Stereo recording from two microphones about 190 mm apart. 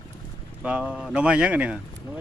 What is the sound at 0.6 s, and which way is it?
Speech, 5° right (ahead or behind).